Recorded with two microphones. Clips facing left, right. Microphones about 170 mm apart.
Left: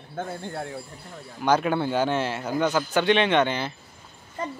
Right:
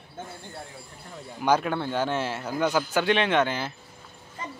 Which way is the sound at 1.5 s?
5° left (ahead or behind).